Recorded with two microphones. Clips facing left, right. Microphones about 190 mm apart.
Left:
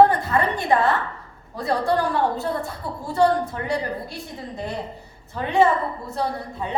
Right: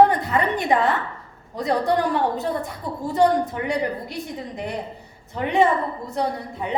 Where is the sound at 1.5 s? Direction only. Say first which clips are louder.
Right 1 dB; 15° right (ahead or behind).